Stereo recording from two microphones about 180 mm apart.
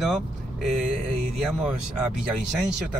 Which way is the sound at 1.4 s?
5° right (ahead or behind).